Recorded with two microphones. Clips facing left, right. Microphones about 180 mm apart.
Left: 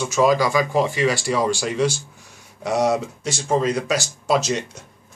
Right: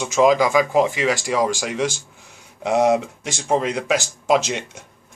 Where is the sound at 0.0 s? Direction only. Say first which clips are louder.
Right 2 dB; 15° right (ahead or behind).